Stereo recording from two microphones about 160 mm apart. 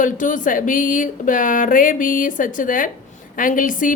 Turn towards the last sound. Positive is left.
turn(degrees=55)  # may be behind; listen again after turning